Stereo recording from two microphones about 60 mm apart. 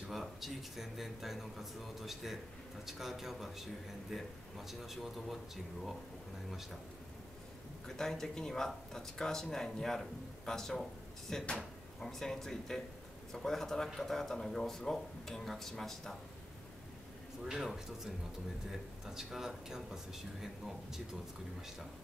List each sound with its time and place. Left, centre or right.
0.1 s speech: centre
7.8 s speech: centre
11.4 s drawer open or close: centre
12.1 s speech: centre
17.5 s speech: centre